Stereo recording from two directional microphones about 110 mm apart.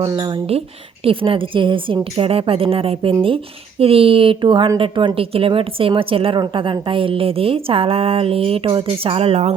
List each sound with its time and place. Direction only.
0.1 s a woman's voice: 40° right (ahead or behind)
1.0 s a woman's voice: 55° right (ahead or behind)